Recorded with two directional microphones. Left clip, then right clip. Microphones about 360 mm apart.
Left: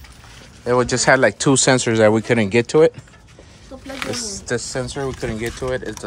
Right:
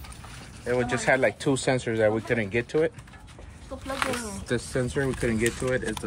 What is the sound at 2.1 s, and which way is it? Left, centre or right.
Speech, left.